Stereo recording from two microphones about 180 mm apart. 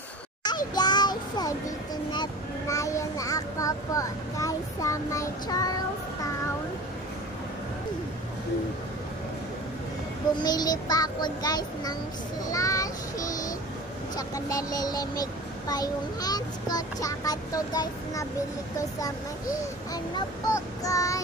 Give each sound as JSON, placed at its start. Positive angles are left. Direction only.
{"t": 0.5, "sound": "child singing", "side_deg": 25}
{"t": 2.7, "sound": "a child's voice", "side_deg": 15}
{"t": 10.4, "sound": "a child's voice", "side_deg": 20}
{"t": 12.4, "sound": "child singing", "side_deg": 20}
{"t": 14.1, "sound": "a child's voice", "side_deg": 20}
{"t": 19.9, "sound": "a child's voice", "side_deg": 20}